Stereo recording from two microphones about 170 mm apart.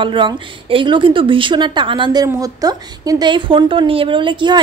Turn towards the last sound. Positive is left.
turn(degrees=-30)  # may be behind; listen again after turning